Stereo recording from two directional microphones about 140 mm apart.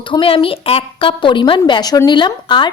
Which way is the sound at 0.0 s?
35° left (ahead or behind).